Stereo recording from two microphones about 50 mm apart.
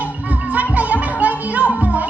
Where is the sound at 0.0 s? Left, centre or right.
Right.